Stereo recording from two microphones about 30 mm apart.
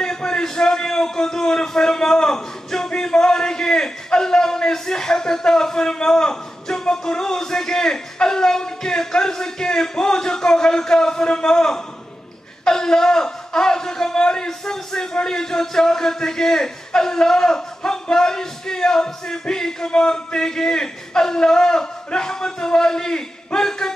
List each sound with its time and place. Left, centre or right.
0.0 s a man's voice: left
3.0 s a sound: left
4.7 s a man's voice: centre
19.9 s a man's voice: left